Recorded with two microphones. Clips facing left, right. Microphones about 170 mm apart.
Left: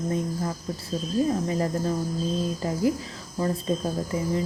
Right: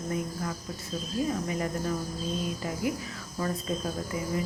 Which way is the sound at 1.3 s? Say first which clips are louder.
Left 5 dB; 30° left (ahead or behind).